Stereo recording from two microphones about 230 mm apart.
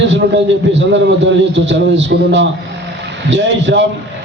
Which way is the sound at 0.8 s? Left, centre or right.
Right.